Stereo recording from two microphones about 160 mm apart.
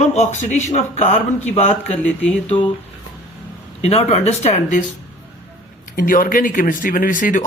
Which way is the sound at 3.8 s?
40° left (ahead or behind).